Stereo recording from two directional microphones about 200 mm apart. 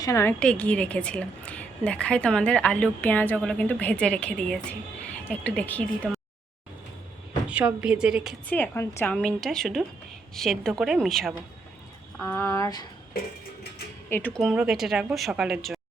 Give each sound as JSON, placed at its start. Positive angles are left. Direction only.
{"t": 0.0, "sound": "a woman's voice", "side_deg": 15}
{"t": 7.4, "sound": "a woman's voice", "side_deg": -5}
{"t": 8.5, "sound": "a woman's voice", "side_deg": 10}
{"t": 12.2, "sound": "speech", "side_deg": 15}
{"t": 14.1, "sound": "a woman's voice", "side_deg": 10}